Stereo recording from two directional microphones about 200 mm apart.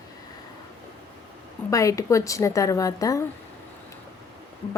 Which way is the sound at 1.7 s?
15° left (ahead or behind).